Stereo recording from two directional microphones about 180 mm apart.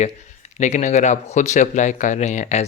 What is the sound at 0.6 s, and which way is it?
Speech, 40° left (ahead or behind).